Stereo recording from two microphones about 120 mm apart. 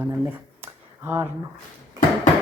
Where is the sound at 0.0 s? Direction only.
15° right (ahead or behind).